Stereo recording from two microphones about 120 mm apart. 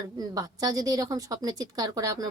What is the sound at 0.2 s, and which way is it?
A woman's voice, 30° right (ahead or behind).